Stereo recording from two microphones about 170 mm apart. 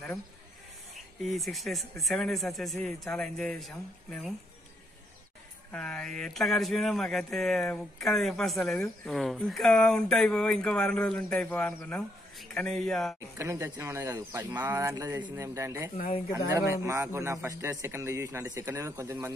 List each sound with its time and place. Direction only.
1.3 s speech: centre (ahead or behind)
5.7 s speech: 5° left (ahead or behind)
13.4 s a man's voice: 15° right (ahead or behind)